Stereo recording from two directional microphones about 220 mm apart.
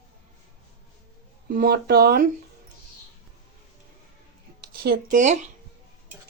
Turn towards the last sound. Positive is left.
turn(degrees=-35)  # may be behind; listen again after turning